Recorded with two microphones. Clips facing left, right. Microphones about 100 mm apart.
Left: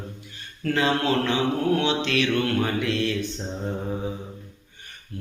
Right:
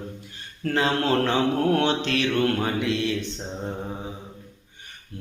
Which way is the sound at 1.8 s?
45° right (ahead or behind).